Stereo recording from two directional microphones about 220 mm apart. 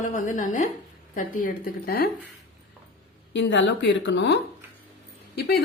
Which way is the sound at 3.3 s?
55° left (ahead or behind).